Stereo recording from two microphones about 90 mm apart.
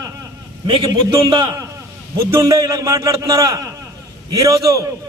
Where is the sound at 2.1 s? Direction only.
35° right (ahead or behind).